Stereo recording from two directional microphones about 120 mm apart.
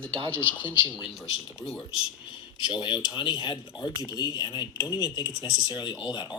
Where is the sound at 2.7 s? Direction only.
40° left (ahead or behind).